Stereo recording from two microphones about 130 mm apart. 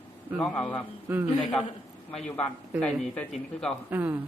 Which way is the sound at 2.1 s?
5° left (ahead or behind).